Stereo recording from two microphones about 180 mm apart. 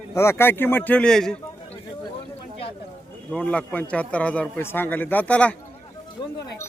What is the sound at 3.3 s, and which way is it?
A man's voice, 5° left (ahead or behind).